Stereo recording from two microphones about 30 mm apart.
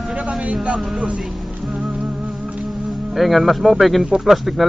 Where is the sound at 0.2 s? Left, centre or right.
Right.